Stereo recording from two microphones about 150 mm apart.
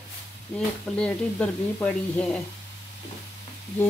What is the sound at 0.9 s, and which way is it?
Speech, 5° left (ahead or behind).